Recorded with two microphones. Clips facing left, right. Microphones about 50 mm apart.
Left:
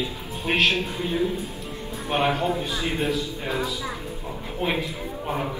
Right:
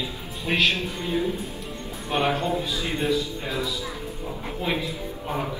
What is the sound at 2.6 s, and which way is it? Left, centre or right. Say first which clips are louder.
A man's voice: left 1 dB; left.